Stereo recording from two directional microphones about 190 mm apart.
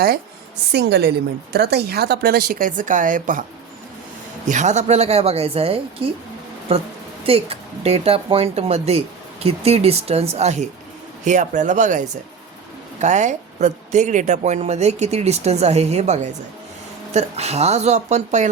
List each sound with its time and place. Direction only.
0.7 s a woman's voice: 60° right (ahead or behind); by 3.4 s 45° right (ahead or behind)
4.4 s speech: 40° right (ahead or behind)
7.3 s speech: 30° right (ahead or behind)